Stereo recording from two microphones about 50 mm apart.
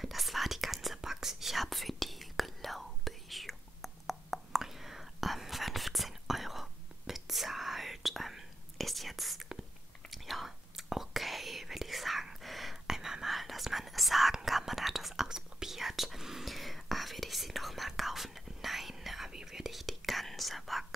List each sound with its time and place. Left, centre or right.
0.0 s whispering: centre